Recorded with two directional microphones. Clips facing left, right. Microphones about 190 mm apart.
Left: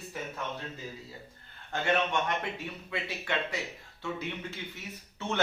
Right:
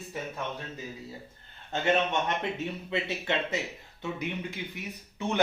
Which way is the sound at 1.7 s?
20° right (ahead or behind).